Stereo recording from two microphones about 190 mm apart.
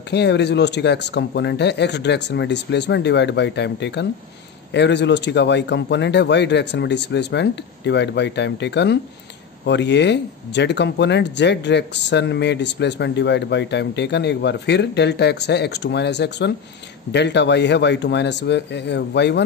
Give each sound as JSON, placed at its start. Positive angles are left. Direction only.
{"t": 0.1, "sound": "speech", "side_deg": 60}